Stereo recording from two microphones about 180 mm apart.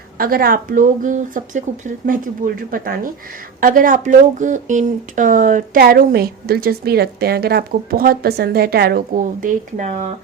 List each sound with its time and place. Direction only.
0.2 s speech: 55° right (ahead or behind)